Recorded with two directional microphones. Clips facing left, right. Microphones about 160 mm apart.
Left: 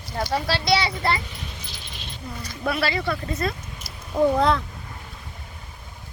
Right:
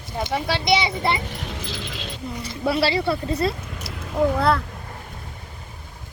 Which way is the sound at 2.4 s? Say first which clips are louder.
Right 4 dB; 25° right (ahead or behind).